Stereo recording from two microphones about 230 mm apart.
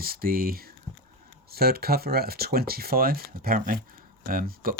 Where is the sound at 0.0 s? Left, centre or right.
Right.